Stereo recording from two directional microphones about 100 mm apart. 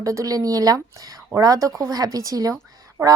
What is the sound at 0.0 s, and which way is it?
Speech, 30° right (ahead or behind).